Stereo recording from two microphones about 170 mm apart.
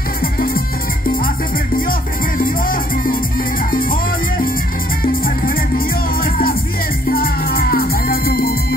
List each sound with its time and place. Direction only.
0.2 s music: 60° left (ahead or behind)
1.8 s music: 55° left (ahead or behind)